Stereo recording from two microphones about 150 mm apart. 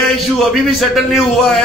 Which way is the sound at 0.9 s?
Centre (ahead or behind).